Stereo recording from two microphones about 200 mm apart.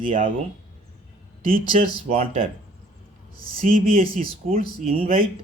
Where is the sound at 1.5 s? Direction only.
40° right (ahead or behind).